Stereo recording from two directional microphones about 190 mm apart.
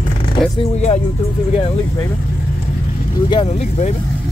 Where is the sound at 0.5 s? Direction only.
35° left (ahead or behind).